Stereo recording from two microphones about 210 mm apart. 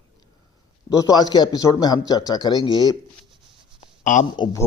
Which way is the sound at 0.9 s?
15° left (ahead or behind).